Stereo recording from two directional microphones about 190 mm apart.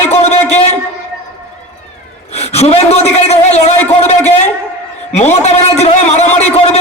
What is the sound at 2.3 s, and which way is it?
A man's voice, 35° left (ahead or behind).